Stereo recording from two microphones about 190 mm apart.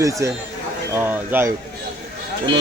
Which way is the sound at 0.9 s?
10° right (ahead or behind).